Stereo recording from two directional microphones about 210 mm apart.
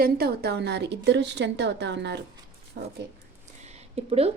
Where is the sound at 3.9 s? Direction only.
30° right (ahead or behind).